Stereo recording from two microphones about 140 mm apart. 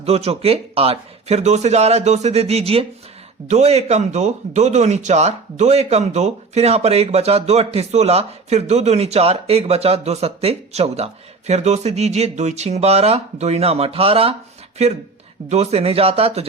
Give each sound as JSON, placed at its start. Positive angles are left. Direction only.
{"t": 0.0, "sound": "speech", "side_deg": -45}